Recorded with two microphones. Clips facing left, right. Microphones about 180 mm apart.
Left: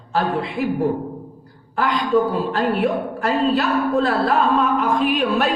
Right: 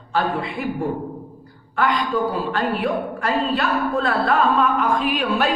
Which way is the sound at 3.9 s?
35° left (ahead or behind).